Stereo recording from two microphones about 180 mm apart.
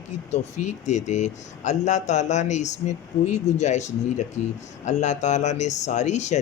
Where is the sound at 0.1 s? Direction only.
40° left (ahead or behind).